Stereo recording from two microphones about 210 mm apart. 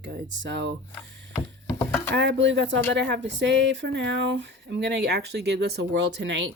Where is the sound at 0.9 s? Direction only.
15° left (ahead or behind).